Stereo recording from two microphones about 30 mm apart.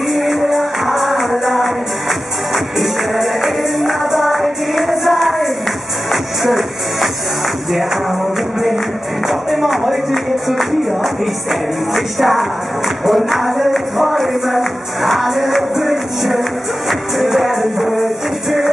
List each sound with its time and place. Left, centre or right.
0.1 s music: centre
9.3 s music: centre